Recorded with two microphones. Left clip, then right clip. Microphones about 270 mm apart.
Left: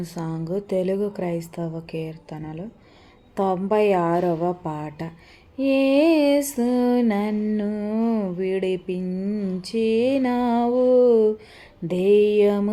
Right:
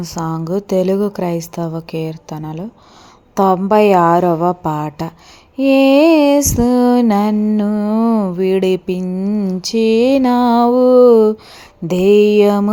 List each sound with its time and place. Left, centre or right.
0.0 s lullaby: right